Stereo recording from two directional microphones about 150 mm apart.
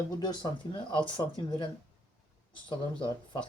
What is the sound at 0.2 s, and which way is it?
Speech, 30° left (ahead or behind).